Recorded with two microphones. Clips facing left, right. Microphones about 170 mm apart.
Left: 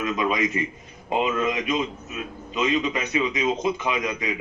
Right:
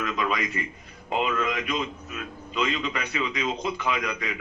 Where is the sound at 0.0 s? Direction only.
20° left (ahead or behind).